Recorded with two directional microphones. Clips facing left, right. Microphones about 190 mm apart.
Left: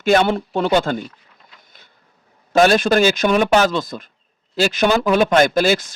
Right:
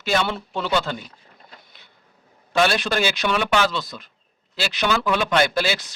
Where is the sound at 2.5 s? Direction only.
45° left (ahead or behind).